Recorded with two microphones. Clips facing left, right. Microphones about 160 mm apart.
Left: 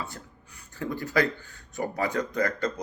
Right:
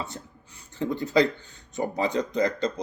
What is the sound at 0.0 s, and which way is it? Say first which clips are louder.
Speech: right 2 dB; 20° right (ahead or behind).